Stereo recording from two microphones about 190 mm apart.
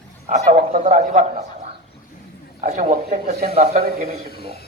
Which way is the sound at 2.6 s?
40° right (ahead or behind).